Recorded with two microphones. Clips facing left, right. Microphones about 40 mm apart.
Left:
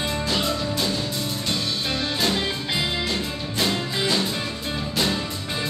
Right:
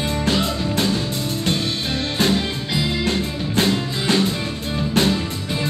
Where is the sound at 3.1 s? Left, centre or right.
Right.